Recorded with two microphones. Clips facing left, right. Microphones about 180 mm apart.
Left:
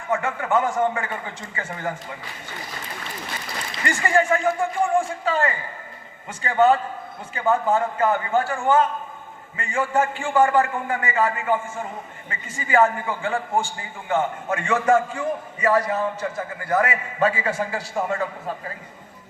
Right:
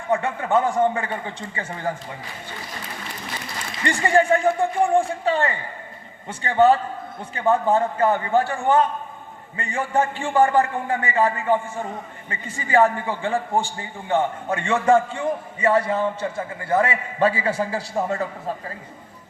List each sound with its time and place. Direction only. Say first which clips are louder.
0.1 s a man's voice: right 2 dB; 30° right (ahead or behind)
3.8 s a man's voice: right 2 dB; 30° right (ahead or behind)